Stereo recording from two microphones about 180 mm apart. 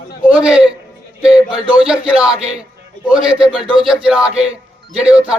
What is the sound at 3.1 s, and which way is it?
Speech, 30° right (ahead or behind).